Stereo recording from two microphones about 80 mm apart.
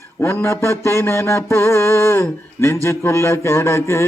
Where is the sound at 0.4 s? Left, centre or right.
Left.